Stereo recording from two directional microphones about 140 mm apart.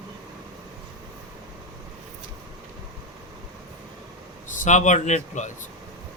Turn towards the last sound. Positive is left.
turn(degrees=55)  # may be behind; listen again after turning